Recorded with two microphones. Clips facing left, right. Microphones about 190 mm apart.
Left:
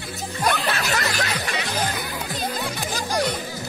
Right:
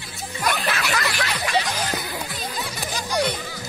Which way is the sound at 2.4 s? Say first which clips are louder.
Left 3 dB; 50° left (ahead or behind).